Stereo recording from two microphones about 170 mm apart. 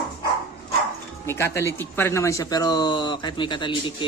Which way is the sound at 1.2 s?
15° left (ahead or behind).